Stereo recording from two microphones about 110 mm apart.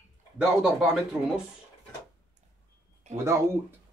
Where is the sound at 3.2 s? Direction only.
25° right (ahead or behind).